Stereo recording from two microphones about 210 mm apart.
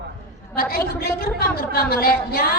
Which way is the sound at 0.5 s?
45° left (ahead or behind).